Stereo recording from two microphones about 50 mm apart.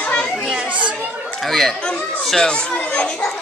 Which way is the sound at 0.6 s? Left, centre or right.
Right.